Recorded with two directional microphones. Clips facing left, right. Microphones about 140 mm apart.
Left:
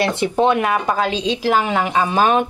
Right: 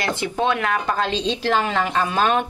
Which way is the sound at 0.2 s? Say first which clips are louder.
Left 5 dB; 20° left (ahead or behind).